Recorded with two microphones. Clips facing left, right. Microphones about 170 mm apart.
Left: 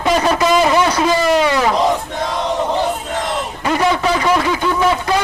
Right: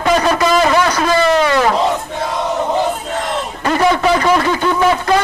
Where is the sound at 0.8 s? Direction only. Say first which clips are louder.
Even; 20° left (ahead or behind).